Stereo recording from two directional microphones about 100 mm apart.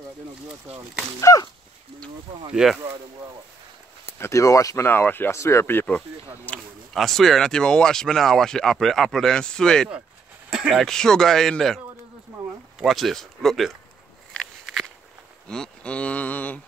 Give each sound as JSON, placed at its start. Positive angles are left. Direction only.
{"t": 1.3, "sound": "speech", "side_deg": 35}
{"t": 2.5, "sound": "speech", "side_deg": -5}
{"t": 4.2, "sound": "speech", "side_deg": 30}
{"t": 4.8, "sound": "speech", "side_deg": 20}
{"t": 6.9, "sound": "speech", "side_deg": 0}
{"t": 10.5, "sound": "speech", "side_deg": -5}
{"t": 10.9, "sound": "speech", "side_deg": 5}
{"t": 15.4, "sound": "speech", "side_deg": 10}